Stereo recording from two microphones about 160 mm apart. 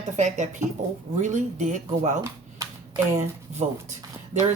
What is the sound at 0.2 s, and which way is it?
A woman's voice, 45° right (ahead or behind).